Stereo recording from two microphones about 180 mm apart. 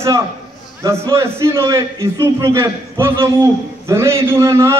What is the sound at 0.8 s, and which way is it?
A man's voice, 15° right (ahead or behind).